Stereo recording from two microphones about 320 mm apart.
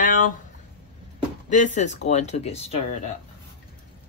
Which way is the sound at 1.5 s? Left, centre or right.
Left.